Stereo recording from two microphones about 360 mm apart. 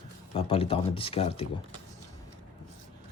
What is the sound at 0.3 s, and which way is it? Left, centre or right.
Speech, centre.